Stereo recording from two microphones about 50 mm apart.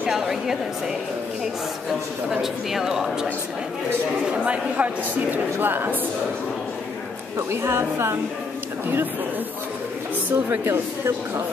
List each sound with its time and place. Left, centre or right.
0.1 s speech: centre
2.4 s speech: centre
4.3 s speech: right
7.3 s speech: right
10.3 s speech: right